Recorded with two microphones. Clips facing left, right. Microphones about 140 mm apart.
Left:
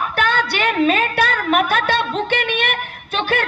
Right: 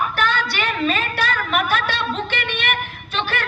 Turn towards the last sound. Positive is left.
turn(degrees=55)  # may be behind; listen again after turning